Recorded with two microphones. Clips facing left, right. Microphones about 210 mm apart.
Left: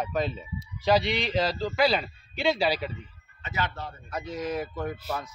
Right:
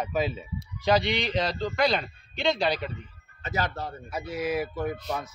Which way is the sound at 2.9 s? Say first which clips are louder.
Even; 40° right (ahead or behind).